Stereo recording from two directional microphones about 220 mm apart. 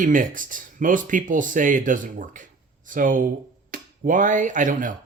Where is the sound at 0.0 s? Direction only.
35° right (ahead or behind).